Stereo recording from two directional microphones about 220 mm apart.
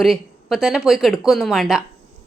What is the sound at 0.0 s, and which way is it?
A woman's voice, centre (ahead or behind).